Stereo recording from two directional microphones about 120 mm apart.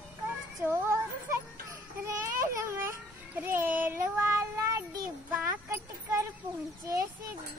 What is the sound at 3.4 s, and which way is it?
Child singing, 15° right (ahead or behind).